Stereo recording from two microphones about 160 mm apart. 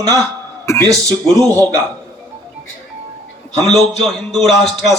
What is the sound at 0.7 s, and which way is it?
Speech, 20° left (ahead or behind).